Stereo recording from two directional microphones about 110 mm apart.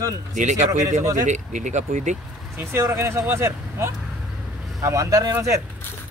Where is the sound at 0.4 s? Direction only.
90° right.